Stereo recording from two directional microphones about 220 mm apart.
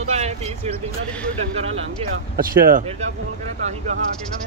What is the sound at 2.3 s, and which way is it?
Speech, 40° right (ahead or behind).